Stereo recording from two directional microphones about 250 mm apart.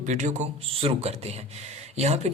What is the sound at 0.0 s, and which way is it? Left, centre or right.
A man's voice, right.